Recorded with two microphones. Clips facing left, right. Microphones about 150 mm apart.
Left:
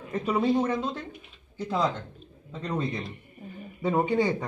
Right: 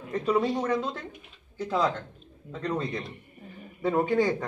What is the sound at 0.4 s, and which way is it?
Speech, 20° left (ahead or behind).